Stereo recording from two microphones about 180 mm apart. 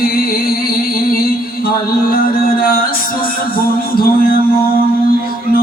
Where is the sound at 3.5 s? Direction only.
55° left (ahead or behind).